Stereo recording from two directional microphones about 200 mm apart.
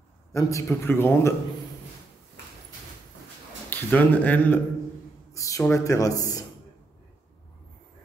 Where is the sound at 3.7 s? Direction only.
10° left (ahead or behind).